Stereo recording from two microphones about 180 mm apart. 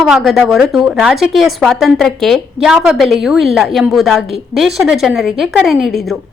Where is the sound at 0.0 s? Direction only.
Centre (ahead or behind).